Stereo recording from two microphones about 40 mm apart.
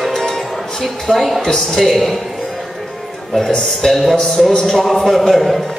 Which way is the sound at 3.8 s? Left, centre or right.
Centre.